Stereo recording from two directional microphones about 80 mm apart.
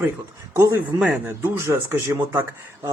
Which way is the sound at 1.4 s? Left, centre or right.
Right.